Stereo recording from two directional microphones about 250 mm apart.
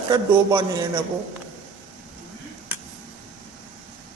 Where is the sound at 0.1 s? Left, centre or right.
Centre.